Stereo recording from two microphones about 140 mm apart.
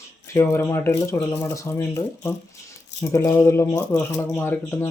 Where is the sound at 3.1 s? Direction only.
15° left (ahead or behind).